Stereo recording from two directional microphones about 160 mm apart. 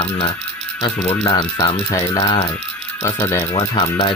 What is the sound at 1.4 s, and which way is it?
Speech, 25° left (ahead or behind).